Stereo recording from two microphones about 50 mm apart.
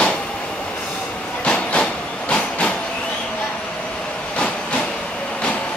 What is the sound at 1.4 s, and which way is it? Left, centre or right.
Train, left.